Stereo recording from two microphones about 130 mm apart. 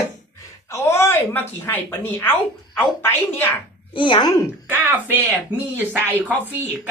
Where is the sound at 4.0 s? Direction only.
35° left (ahead or behind).